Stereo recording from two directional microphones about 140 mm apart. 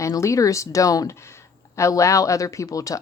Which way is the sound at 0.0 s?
20° left (ahead or behind).